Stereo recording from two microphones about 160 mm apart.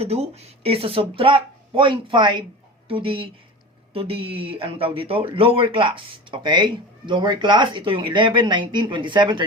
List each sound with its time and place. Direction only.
0.0 s speech: 40° right (ahead or behind)